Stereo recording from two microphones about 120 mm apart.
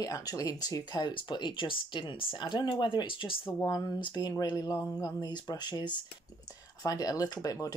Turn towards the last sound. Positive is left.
turn(degrees=30)  # may be behind; listen again after turning